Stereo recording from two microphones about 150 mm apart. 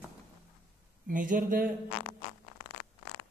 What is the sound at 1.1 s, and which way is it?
Speech, 65° right (ahead or behind).